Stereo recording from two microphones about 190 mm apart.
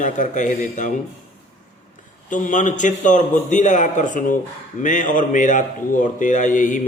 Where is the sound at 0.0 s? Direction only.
40° left (ahead or behind).